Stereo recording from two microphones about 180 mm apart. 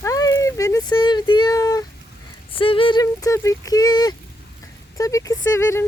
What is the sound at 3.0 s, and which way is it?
Speech, 15° left (ahead or behind).